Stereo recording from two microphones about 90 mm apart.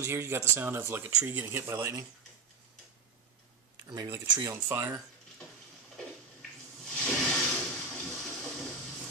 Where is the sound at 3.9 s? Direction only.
40° right (ahead or behind).